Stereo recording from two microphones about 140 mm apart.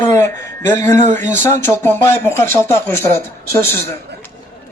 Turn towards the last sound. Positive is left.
turn(degrees=15)  # may be behind; listen again after turning